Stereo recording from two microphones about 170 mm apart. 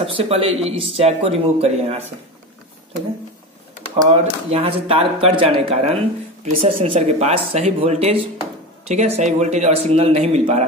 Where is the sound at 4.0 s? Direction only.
35° right (ahead or behind).